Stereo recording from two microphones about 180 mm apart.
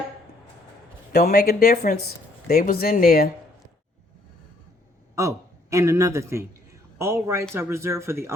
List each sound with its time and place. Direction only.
1.1 s speech: 60° left (ahead or behind)
5.2 s speech: 15° right (ahead or behind)